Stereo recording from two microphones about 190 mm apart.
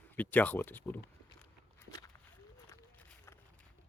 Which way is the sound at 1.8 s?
20° left (ahead or behind).